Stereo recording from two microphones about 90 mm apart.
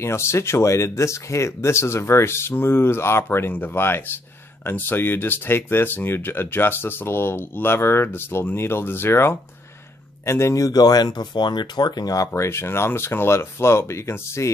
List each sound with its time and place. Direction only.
0.0 s speech: 30° left (ahead or behind)
12.3 s speech: 30° left (ahead or behind)